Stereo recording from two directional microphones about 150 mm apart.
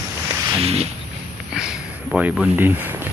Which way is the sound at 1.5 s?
5° right (ahead or behind).